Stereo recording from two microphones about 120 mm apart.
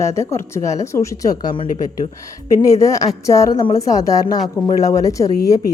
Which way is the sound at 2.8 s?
30° left (ahead or behind).